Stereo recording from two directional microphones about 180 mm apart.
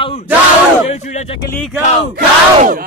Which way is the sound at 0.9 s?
40° left (ahead or behind).